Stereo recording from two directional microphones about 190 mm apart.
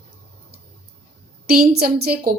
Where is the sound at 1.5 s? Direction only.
55° right (ahead or behind).